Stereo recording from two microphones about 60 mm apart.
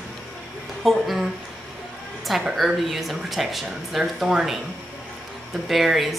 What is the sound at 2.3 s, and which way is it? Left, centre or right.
Speech, centre.